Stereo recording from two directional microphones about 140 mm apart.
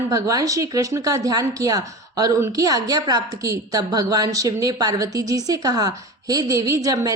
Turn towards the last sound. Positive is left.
turn(degrees=-25)  # may be behind; listen again after turning